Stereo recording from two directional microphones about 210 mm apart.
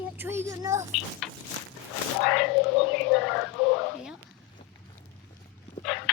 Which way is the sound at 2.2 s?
Centre (ahead or behind).